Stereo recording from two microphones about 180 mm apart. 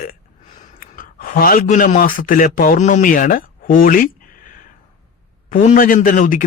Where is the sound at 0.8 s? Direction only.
50° left (ahead or behind).